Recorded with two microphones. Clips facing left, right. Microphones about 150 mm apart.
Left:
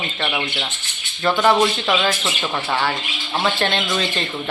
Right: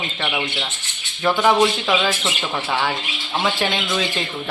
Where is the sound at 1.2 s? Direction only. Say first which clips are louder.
Even; 10° right (ahead or behind).